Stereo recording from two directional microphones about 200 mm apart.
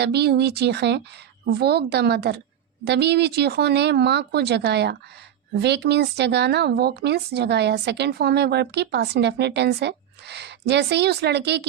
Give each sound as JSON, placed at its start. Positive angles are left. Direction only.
{"t": 0.0, "sound": "speech", "side_deg": -55}